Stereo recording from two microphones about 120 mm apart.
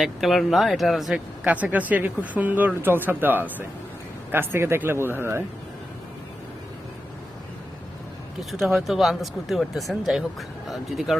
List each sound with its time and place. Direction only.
0.0 s speech: centre (ahead or behind)
1.5 s speech: 10° right (ahead or behind)
8.4 s speech: centre (ahead or behind)